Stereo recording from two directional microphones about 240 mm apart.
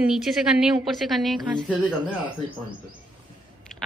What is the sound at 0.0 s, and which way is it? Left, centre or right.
A woman's voice, centre.